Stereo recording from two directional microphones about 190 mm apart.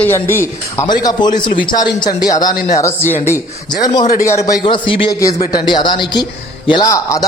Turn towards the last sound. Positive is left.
turn(degrees=15)  # may be behind; listen again after turning